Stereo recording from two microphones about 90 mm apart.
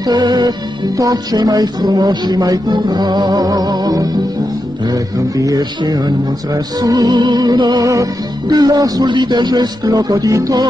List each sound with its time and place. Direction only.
0.0 s music: 50° right (ahead or behind)
5.4 s music: 45° right (ahead or behind)
7.8 s music: 40° right (ahead or behind)